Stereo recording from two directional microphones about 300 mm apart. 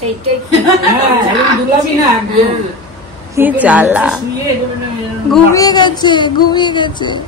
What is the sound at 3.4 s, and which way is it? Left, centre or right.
Speech, centre.